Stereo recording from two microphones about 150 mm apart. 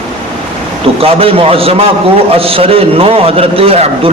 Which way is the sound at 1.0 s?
40° right (ahead or behind).